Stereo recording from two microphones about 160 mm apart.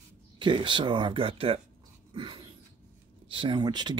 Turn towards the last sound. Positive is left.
turn(degrees=-30)  # may be behind; listen again after turning